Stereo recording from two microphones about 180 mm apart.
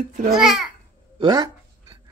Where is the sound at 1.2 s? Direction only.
25° right (ahead or behind).